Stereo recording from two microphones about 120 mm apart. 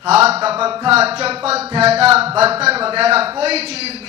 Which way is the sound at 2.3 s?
55° right (ahead or behind).